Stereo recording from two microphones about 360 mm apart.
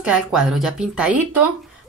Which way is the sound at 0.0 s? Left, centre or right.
Centre.